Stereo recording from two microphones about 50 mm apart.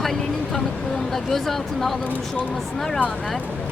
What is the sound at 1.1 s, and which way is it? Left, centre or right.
Speech, centre.